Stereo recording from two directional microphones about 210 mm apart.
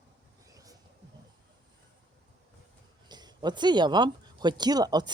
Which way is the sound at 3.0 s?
20° right (ahead or behind).